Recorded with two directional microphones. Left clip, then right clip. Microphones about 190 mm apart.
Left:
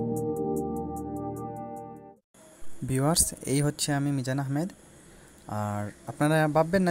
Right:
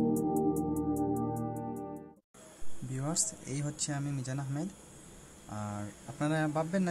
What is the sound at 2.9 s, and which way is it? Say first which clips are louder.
A man's voice: left 9 dB; 45° left (ahead or behind).